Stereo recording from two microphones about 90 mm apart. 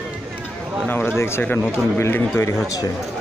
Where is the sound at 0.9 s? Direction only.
20° left (ahead or behind).